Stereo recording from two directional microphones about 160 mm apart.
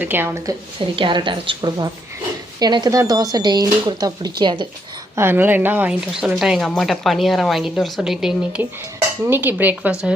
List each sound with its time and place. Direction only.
0.0 s speech: 15° right (ahead or behind)
0.8 s a woman's voice: 30° right (ahead or behind)
5.1 s speech: 15° right (ahead or behind)